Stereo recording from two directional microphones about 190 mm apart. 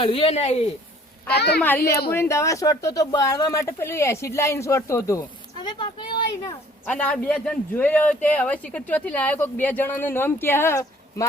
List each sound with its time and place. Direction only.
0.0 s speech: 30° left (ahead or behind)
1.3 s a child's voice: 60° left (ahead or behind)
2.1 s speech: 15° left (ahead or behind)
6.8 s speech: 5° left (ahead or behind)